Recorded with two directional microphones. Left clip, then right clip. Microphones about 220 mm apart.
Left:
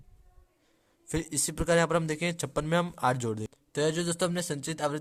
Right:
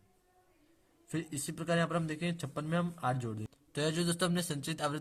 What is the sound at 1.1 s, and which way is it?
A man's voice, 40° left (ahead or behind).